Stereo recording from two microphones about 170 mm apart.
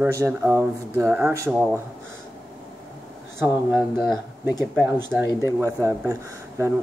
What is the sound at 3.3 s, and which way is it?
Speech, 15° right (ahead or behind).